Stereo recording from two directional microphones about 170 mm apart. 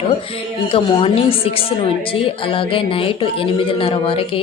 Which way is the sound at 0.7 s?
30° left (ahead or behind).